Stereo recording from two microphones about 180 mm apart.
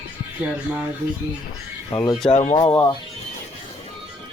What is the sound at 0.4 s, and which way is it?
Speech, 5° right (ahead or behind).